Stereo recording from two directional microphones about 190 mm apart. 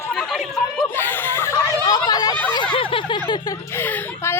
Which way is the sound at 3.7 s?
10° left (ahead or behind).